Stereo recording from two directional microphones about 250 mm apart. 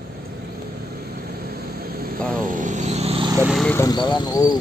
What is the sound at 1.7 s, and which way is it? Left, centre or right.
Vehicle, right.